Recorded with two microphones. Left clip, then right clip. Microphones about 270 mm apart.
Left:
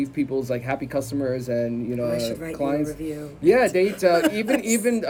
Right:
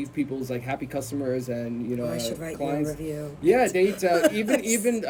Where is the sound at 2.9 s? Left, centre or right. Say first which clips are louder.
Left 1 dB; centre.